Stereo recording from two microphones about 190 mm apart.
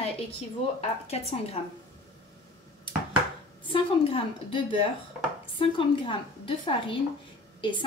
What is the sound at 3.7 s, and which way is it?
A woman's voice, 30° left (ahead or behind).